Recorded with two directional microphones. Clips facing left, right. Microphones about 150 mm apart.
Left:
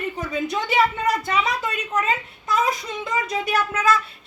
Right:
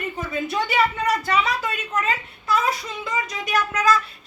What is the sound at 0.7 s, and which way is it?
A woman's voice, 20° left (ahead or behind).